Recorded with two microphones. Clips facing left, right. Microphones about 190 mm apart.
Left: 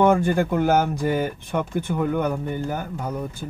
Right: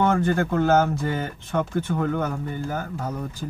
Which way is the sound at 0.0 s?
10° left (ahead or behind).